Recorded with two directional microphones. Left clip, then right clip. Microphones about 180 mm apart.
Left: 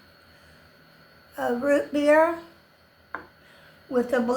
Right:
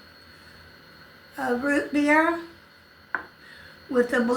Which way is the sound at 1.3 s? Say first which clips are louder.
Left 2 dB; 30° left (ahead or behind).